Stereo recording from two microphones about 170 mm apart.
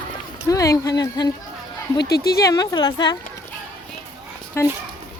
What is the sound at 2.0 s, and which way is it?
Speech, 70° left (ahead or behind).